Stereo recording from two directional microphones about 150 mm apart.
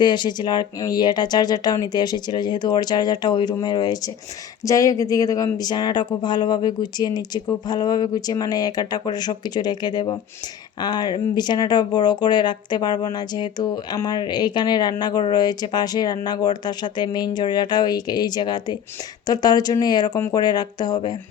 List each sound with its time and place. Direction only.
0.0 s speech: 30° left (ahead or behind)